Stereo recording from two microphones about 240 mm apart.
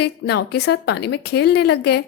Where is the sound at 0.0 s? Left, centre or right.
Left.